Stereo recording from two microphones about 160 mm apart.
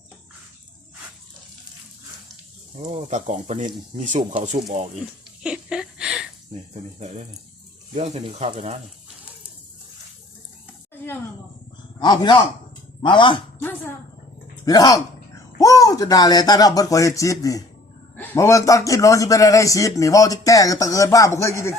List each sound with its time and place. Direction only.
2.8 s speech: 45° right (ahead or behind)
5.4 s a sound: 5° right (ahead or behind)
7.9 s speech: 40° right (ahead or behind)
11.9 s a man's voice: 30° left (ahead or behind)
13.6 s a woman's voice: 10° left (ahead or behind)
14.6 s a man's voice: 25° left (ahead or behind)